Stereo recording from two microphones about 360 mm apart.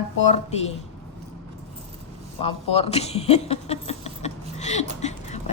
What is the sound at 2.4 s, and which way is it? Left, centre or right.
Speech, centre.